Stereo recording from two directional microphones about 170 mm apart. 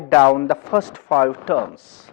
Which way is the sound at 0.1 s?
10° left (ahead or behind).